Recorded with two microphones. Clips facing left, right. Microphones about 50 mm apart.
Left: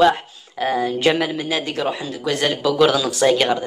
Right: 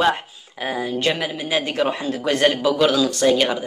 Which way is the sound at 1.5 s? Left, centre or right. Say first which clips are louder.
Right 1 dB; right.